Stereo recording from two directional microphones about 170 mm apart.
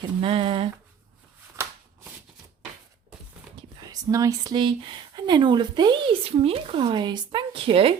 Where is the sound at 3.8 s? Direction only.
20° right (ahead or behind).